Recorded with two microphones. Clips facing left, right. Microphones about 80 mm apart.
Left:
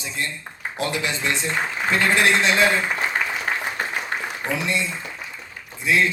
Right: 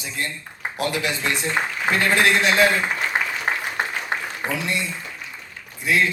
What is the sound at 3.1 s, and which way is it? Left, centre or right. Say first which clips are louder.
Applause: right 3 dB; centre.